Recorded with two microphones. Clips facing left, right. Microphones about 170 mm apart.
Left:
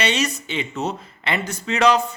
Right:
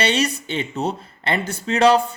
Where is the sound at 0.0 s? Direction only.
30° right (ahead or behind).